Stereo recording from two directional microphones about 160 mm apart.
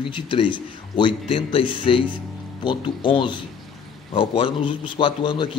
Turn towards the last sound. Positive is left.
turn(degrees=30)  # may be behind; listen again after turning